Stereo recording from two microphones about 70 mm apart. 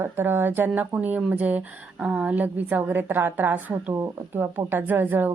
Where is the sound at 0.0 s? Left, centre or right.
Right.